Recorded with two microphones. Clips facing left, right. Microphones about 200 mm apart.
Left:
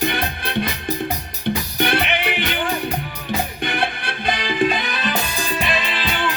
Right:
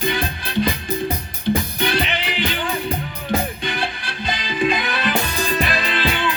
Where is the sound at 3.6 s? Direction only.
60° left (ahead or behind).